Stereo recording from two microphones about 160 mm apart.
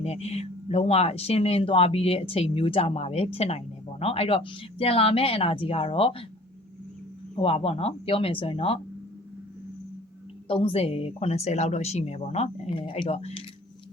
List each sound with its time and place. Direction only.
0.0 s speech: 40° left (ahead or behind)
7.3 s speech: 35° left (ahead or behind)
10.5 s speech: 35° left (ahead or behind)